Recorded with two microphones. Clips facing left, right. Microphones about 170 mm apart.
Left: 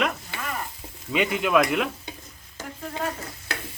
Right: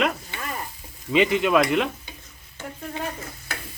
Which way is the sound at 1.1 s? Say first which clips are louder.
Right 3 dB; centre (ahead or behind).